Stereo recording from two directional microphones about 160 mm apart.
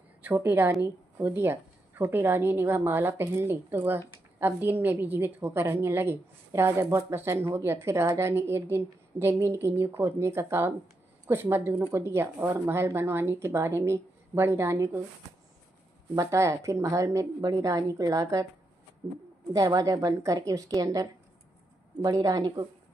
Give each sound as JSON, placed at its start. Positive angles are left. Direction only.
{"t": 0.2, "sound": "a woman's voice", "side_deg": -15}
{"t": 16.2, "sound": "a woman's voice", "side_deg": -20}
{"t": 19.0, "sound": "speech", "side_deg": 0}
{"t": 19.5, "sound": "a woman's voice", "side_deg": -25}